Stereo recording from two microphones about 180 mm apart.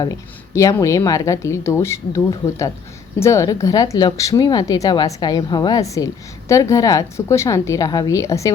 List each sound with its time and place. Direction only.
0.5 s a woman's voice: 15° left (ahead or behind)